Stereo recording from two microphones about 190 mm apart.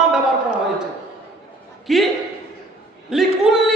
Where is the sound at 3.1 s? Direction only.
Centre (ahead or behind).